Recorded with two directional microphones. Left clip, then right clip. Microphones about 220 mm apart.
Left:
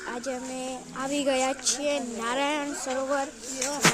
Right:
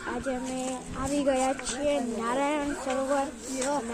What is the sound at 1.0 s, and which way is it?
Speech, 25° left (ahead or behind).